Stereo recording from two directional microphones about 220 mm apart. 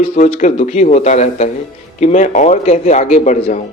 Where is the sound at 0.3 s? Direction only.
30° left (ahead or behind).